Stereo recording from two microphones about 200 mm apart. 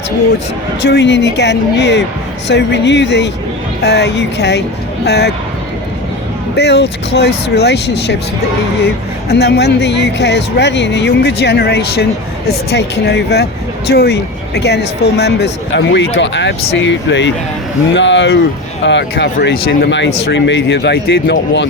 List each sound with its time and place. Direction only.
0.8 s speech: 60° left (ahead or behind)
6.6 s speech: 55° left (ahead or behind)
9.3 s speech: 55° left (ahead or behind)